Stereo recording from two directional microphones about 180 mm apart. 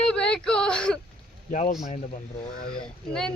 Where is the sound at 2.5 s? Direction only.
55° left (ahead or behind).